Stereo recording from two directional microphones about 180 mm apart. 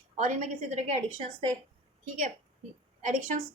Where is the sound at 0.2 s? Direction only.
40° right (ahead or behind).